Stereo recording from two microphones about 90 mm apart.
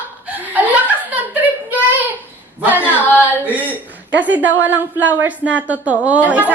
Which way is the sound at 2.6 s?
15° right (ahead or behind).